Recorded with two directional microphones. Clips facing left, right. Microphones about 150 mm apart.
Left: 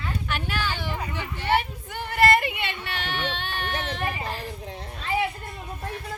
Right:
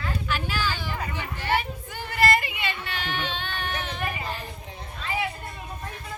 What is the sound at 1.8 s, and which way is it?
Baby cry, 60° left (ahead or behind).